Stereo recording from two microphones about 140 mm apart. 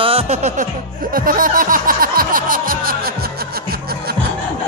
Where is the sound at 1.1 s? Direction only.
85° right.